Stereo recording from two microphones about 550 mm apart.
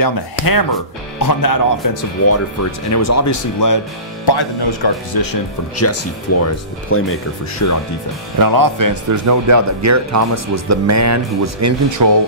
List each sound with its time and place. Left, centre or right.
0.0 s speech: left
4.3 s speech: left
5.8 s speech: left
8.4 s speech: right